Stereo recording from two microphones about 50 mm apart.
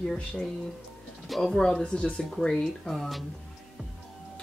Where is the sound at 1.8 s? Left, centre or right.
Centre.